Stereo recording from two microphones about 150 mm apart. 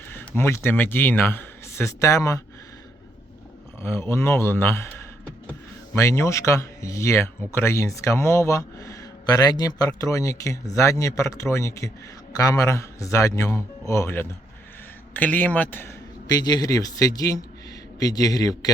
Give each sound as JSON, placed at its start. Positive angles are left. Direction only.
{"t": 0.1, "sound": "speech", "side_deg": 15}
{"t": 3.8, "sound": "speech", "side_deg": 15}
{"t": 16.2, "sound": "speech", "side_deg": 25}